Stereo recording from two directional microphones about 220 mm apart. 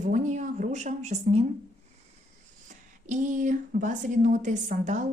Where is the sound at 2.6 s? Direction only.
35° right (ahead or behind).